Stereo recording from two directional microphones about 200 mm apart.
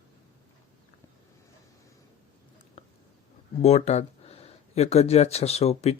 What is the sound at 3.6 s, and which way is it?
Speech, 35° left (ahead or behind).